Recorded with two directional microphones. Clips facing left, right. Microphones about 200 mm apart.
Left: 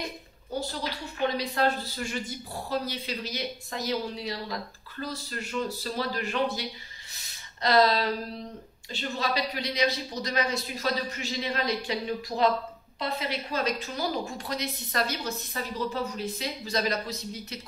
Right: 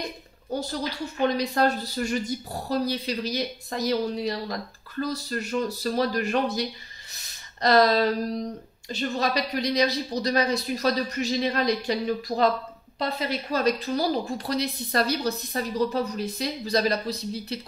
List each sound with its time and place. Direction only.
1.3 s speech: 40° right (ahead or behind)
7.6 s speech: 40° right (ahead or behind)